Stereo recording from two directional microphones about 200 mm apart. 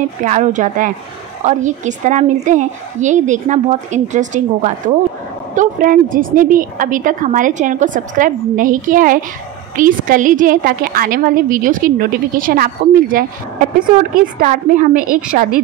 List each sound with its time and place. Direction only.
0.2 s a woman's voice: 40° right (ahead or behind)